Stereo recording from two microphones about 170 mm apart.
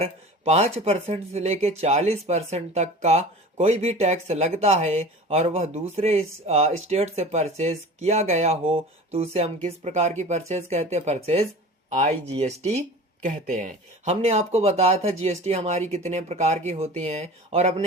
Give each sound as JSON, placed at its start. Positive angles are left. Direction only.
{"t": 0.0, "sound": "speech", "side_deg": -40}